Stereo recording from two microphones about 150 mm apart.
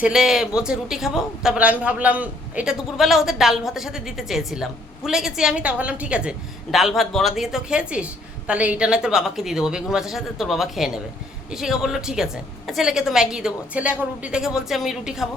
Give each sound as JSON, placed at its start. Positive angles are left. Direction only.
{"t": 0.0, "sound": "speech", "side_deg": -5}